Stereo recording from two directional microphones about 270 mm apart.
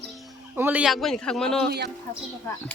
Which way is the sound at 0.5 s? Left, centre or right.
Centre.